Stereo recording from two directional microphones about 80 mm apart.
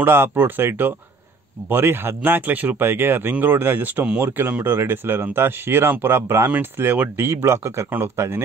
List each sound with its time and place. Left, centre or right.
0.0 s speech: right